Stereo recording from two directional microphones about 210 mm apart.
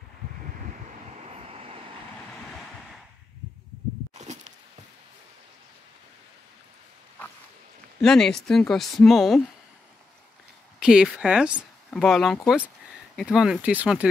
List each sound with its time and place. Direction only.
1.1 s vehicle: 30° right (ahead or behind)
4.2 s walk: 35° right (ahead or behind)
8.0 s speech: 5° left (ahead or behind)
10.8 s speech: 5° right (ahead or behind)